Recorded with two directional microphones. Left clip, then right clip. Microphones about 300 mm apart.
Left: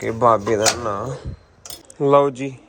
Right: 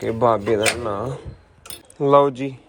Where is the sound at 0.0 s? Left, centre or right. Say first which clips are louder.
Left 2 dB; centre.